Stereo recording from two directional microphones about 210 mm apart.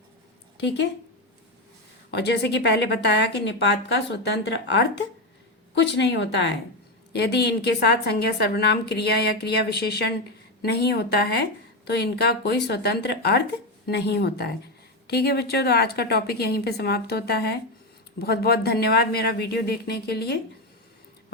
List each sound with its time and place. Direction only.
0.5 s speech: 55° left (ahead or behind)
2.0 s a woman's voice: 55° left (ahead or behind)